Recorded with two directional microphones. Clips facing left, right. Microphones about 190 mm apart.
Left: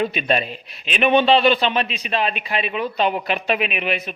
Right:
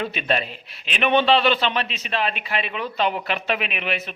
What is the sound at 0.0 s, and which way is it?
A man's voice, 15° left (ahead or behind).